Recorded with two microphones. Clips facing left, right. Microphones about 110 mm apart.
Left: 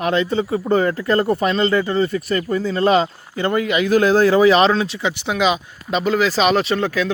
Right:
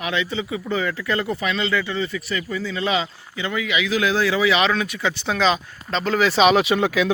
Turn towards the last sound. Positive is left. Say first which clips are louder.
# even
turn(degrees=-10)  # may be behind; listen again after turning